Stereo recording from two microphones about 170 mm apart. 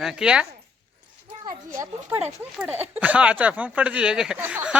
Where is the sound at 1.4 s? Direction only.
15° right (ahead or behind).